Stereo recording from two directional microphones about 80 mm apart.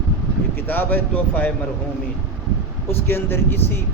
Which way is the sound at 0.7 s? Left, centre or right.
Left.